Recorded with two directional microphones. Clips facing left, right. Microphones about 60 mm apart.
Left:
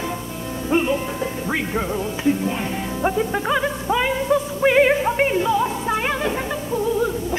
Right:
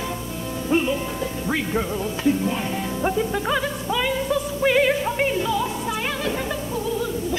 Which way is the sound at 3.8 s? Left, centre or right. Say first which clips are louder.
Left 4 dB; left.